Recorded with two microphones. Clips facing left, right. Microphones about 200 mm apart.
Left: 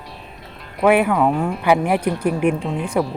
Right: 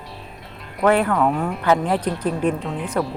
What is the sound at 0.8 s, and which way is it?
Speech, 10° left (ahead or behind).